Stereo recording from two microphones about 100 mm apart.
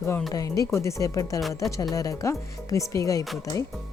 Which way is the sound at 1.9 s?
35° left (ahead or behind).